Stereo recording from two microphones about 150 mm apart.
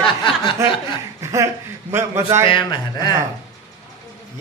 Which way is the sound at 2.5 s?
30° left (ahead or behind).